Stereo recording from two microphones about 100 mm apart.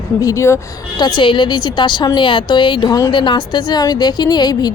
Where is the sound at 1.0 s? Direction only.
50° left (ahead or behind).